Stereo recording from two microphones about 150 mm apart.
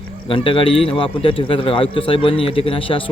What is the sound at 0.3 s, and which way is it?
Speech, 35° left (ahead or behind).